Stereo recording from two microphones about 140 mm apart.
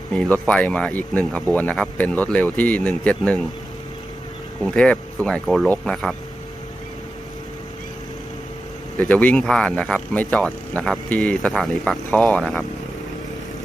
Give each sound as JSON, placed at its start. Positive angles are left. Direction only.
{"t": 0.1, "sound": "speech", "side_deg": 10}
{"t": 4.6, "sound": "speech", "side_deg": 5}
{"t": 9.0, "sound": "speech", "side_deg": 10}